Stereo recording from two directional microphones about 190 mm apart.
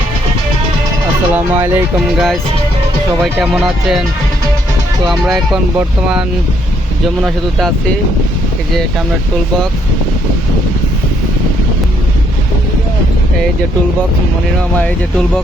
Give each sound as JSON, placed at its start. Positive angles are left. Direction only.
{"t": 1.3, "sound": "speech", "side_deg": -10}
{"t": 2.1, "sound": "speech", "side_deg": 0}
{"t": 5.0, "sound": "speech", "side_deg": -5}